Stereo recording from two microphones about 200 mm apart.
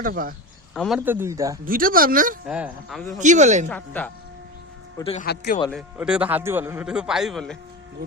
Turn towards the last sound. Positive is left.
turn(degrees=0)  # may be behind; listen again after turning